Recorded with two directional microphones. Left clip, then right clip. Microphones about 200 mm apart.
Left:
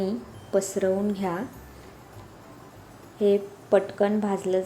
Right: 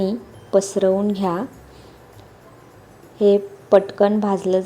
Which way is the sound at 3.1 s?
25° right (ahead or behind).